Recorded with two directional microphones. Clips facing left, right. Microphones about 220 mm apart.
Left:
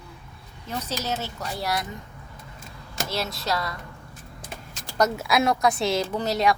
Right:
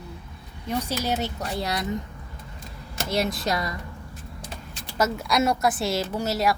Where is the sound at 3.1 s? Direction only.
15° right (ahead or behind).